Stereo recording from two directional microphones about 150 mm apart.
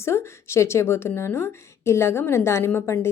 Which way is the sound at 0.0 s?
15° left (ahead or behind).